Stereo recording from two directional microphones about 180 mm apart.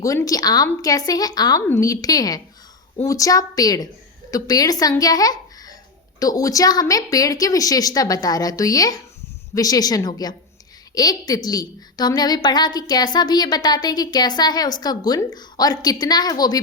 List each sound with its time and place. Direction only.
0.0 s a woman's voice: 20° left (ahead or behind)